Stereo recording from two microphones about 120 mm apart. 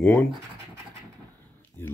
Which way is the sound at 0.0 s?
10° left (ahead or behind).